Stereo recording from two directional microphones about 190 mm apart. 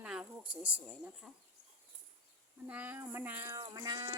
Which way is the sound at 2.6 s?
10° right (ahead or behind).